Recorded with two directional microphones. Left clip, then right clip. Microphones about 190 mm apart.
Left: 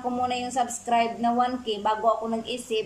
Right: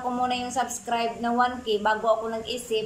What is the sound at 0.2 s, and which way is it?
A woman's voice, 10° left (ahead or behind).